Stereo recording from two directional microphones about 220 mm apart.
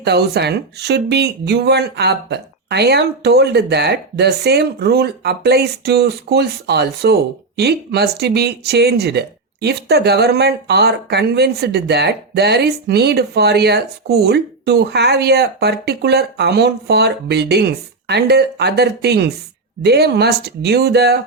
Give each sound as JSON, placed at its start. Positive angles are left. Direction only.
{"t": 0.0, "sound": "speech", "side_deg": -50}